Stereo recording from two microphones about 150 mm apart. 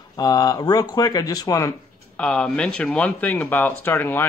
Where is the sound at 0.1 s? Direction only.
25° left (ahead or behind).